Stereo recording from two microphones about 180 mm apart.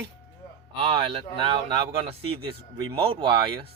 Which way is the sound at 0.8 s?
30° right (ahead or behind).